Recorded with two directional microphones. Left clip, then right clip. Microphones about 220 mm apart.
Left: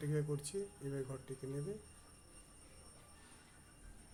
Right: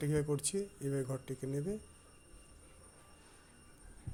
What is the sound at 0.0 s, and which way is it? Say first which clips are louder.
Speech: right 6 dB; 30° right (ahead or behind).